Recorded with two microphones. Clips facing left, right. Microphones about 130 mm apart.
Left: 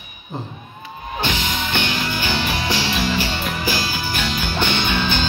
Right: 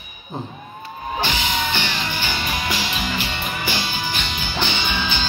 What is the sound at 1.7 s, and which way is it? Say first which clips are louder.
Music: left 2 dB; 55° left (ahead or behind).